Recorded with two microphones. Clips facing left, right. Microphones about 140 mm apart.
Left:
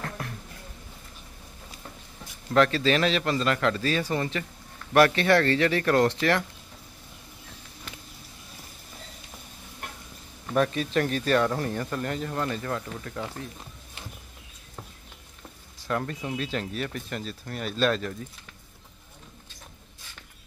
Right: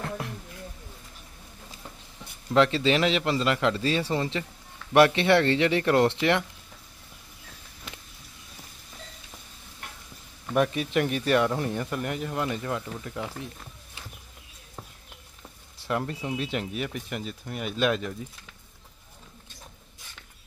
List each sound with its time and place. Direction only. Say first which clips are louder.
2.5 s a man's voice: even; 20° right (ahead or behind)
10.5 s speech: even; 15° right (ahead or behind)
15.9 s speech: even; 15° right (ahead or behind)